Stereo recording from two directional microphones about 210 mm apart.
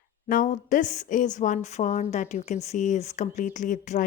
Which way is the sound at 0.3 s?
40° left (ahead or behind).